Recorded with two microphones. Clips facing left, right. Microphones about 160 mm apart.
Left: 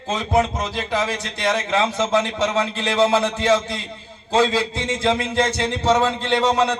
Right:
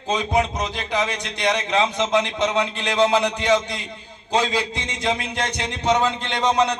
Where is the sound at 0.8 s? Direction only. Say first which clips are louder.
Left 2 dB; 20° right (ahead or behind).